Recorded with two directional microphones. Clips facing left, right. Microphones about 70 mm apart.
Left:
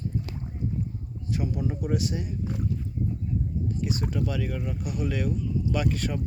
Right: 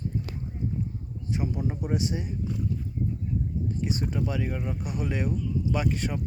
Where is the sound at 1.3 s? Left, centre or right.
Right.